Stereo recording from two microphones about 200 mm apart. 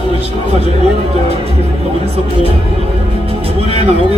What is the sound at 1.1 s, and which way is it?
Speech, 30° right (ahead or behind).